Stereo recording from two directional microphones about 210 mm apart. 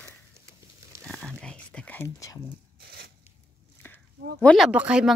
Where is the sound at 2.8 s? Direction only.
50° right (ahead or behind).